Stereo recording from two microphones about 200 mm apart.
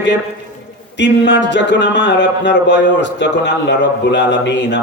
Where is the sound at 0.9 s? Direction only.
60° left (ahead or behind).